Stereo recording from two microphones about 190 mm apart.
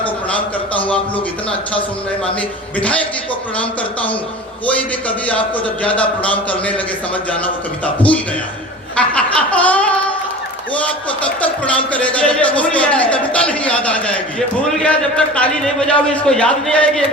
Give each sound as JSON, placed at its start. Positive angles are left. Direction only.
{"t": 0.3, "sound": "a sound", "side_deg": 5}
{"t": 1.1, "sound": "a man's voice", "side_deg": 30}
{"t": 2.7, "sound": "speech", "side_deg": 5}
{"t": 4.6, "sound": "speech", "side_deg": 5}
{"t": 9.0, "sound": "snicker", "side_deg": 5}
{"t": 11.3, "sound": "speech", "side_deg": 5}